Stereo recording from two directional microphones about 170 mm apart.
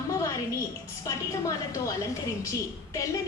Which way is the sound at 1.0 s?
20° left (ahead or behind).